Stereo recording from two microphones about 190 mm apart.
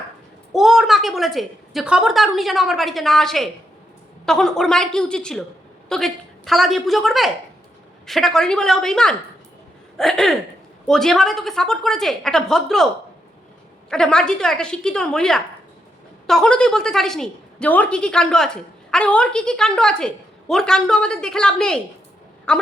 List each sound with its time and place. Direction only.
0.5 s a woman's voice: centre (ahead or behind)
13.9 s a woman's voice: 5° left (ahead or behind)